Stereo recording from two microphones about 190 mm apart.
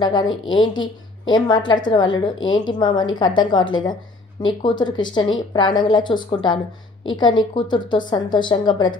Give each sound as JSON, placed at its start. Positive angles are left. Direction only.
{"t": 0.0, "sound": "a woman's voice", "side_deg": 20}